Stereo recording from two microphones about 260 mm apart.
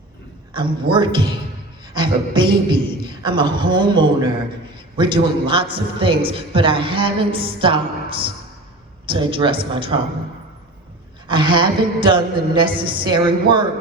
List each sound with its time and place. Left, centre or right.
0.5 s a man's voice: centre
11.3 s a man's voice: centre